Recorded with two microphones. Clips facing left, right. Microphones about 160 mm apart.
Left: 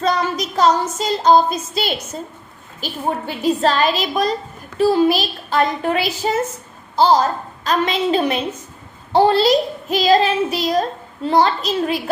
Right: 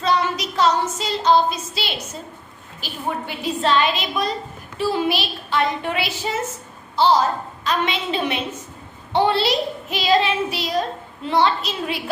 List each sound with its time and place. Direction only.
0.0 s child singing: 45° left (ahead or behind)
2.8 s a child's voice: 40° left (ahead or behind)